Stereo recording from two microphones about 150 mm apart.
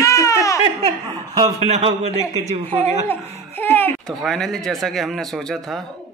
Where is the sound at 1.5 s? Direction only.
45° right (ahead or behind).